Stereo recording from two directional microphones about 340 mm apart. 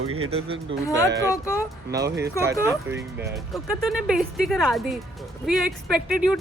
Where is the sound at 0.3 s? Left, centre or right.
Centre.